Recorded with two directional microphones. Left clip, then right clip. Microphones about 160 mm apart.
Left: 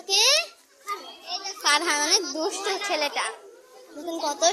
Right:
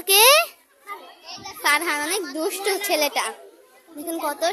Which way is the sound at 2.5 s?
45° right (ahead or behind).